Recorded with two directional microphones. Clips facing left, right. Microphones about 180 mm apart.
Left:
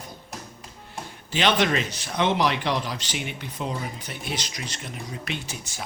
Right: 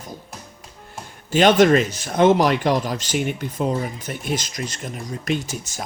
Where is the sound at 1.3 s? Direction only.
45° right (ahead or behind).